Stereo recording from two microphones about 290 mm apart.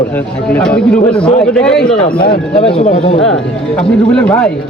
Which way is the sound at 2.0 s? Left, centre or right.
Centre.